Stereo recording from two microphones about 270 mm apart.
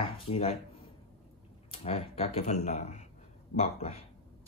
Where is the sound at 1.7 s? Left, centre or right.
Left.